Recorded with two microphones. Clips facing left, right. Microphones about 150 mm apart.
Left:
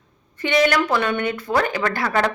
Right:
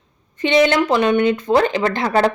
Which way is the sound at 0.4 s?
20° right (ahead or behind).